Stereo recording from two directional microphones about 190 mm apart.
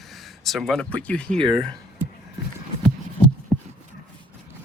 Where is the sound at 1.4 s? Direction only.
25° right (ahead or behind).